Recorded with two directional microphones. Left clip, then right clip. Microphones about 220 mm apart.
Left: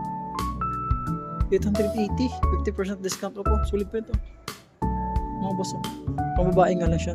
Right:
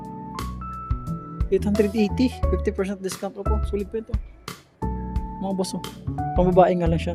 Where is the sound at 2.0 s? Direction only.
25° right (ahead or behind); by 5.2 s centre (ahead or behind).